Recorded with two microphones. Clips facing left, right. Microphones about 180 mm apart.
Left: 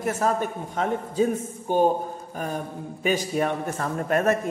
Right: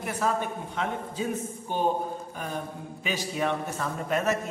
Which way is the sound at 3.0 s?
50° left (ahead or behind).